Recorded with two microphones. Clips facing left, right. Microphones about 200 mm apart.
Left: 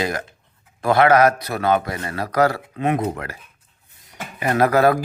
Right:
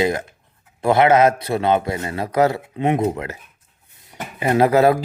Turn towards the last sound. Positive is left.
turn(degrees=-25)  # may be behind; listen again after turning